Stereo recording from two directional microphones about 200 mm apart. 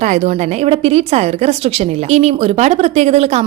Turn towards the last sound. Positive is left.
turn(degrees=-30)  # may be behind; listen again after turning